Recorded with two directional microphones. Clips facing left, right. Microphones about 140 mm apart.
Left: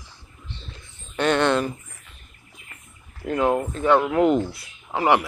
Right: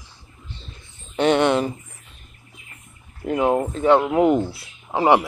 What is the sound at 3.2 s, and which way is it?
Speech, 20° right (ahead or behind).